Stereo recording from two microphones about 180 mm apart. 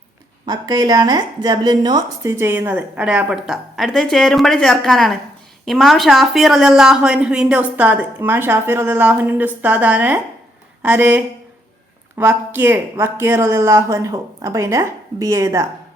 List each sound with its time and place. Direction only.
0.4 s speech: 20° right (ahead or behind)